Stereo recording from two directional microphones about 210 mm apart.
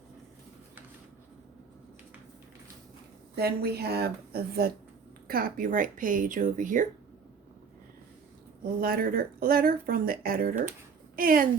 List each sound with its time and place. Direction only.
3.3 s speech: 50° right (ahead or behind)
8.8 s speech: 45° right (ahead or behind)